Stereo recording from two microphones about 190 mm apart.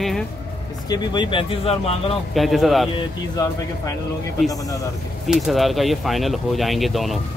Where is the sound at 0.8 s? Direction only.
20° left (ahead or behind).